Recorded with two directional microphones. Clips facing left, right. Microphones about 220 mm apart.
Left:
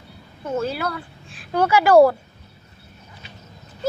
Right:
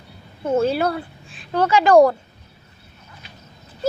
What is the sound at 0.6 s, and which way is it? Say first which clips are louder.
Speech: right 6 dB; 30° right (ahead or behind).